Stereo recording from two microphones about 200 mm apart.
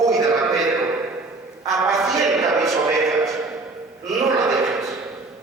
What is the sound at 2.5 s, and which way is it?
Music, 15° right (ahead or behind).